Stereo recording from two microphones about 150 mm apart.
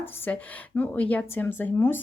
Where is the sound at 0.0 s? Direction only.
15° left (ahead or behind).